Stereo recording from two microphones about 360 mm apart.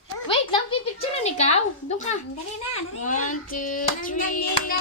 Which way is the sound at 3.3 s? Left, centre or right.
Left.